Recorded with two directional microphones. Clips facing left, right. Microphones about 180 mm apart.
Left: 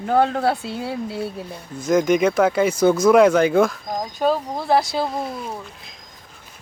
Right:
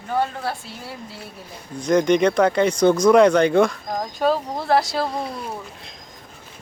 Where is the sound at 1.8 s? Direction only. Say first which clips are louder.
Even; 5° left (ahead or behind).